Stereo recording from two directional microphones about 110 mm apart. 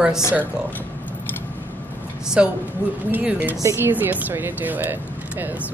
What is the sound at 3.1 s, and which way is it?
Speech, 15° right (ahead or behind).